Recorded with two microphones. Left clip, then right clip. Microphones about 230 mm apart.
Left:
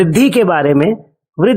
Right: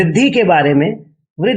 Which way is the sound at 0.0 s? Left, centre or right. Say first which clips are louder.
Left 1 dB; left.